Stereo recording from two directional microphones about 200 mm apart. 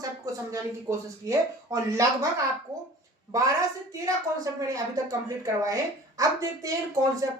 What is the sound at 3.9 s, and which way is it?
A woman's voice, 15° right (ahead or behind).